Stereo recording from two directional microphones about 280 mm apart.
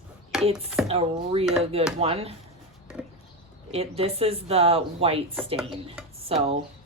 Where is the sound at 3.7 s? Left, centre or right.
Right.